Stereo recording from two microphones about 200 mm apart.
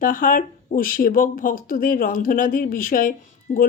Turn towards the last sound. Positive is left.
turn(degrees=40)  # may be behind; listen again after turning